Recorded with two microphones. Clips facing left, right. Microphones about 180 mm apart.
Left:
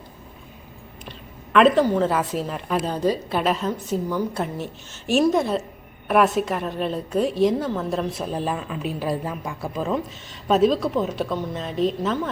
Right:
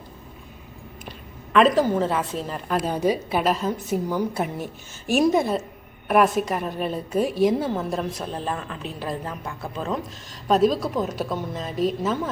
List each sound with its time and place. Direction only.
1.9 s a woman's voice: centre (ahead or behind)
5.4 s a woman's voice: centre (ahead or behind)